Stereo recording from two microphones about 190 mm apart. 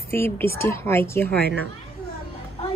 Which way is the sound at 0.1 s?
15° left (ahead or behind).